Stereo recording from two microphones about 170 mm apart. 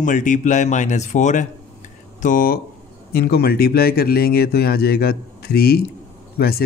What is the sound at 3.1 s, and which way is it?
Speech, 65° left (ahead or behind).